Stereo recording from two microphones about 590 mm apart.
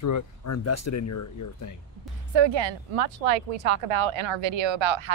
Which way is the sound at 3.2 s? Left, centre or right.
Right.